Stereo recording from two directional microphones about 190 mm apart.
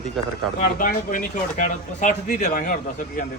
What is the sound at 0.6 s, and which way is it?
Speech, 45° left (ahead or behind).